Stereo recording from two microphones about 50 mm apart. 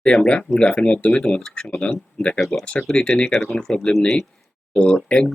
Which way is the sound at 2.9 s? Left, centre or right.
Centre.